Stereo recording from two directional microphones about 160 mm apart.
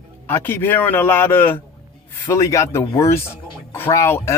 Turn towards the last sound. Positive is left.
turn(degrees=15)  # may be behind; listen again after turning